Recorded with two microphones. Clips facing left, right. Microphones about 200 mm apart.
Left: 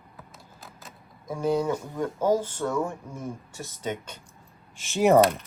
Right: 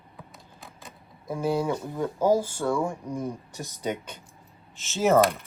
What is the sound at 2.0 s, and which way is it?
Speech, 10° right (ahead or behind).